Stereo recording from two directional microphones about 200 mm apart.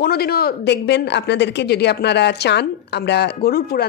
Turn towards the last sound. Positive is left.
turn(degrees=50)  # may be behind; listen again after turning